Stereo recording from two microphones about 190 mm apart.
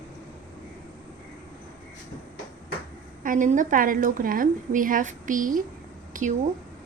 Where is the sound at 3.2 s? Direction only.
45° right (ahead or behind).